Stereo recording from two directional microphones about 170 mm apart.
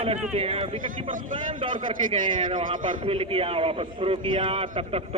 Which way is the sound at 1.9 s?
30° right (ahead or behind).